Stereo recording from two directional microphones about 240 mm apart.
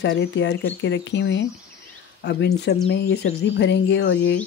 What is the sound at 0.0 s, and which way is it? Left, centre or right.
Speech, left.